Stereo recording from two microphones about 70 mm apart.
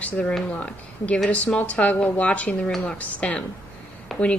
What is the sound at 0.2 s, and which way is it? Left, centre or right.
A woman's voice, centre.